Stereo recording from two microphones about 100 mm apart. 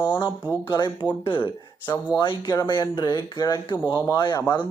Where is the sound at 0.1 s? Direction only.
50° left (ahead or behind).